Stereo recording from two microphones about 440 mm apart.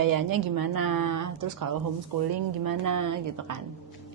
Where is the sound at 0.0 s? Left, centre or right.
Right.